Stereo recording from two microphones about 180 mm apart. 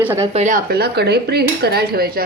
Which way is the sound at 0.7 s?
60° right (ahead or behind).